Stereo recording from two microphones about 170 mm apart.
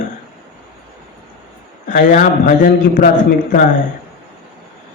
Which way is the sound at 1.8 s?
50° left (ahead or behind).